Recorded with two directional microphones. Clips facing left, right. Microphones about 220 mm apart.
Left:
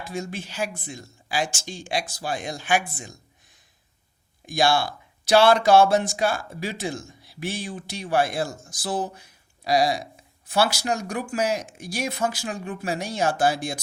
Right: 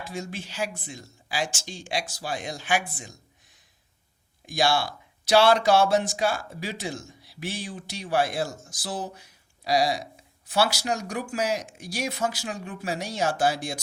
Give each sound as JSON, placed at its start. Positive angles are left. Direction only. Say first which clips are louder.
{"t": 0.1, "sound": "speech", "louder": "left 5 dB", "side_deg": 50}
{"t": 4.4, "sound": "speech", "louder": "left 3 dB", "side_deg": 50}